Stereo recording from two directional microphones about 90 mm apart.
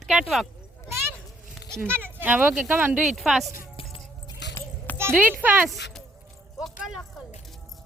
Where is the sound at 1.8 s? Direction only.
25° right (ahead or behind).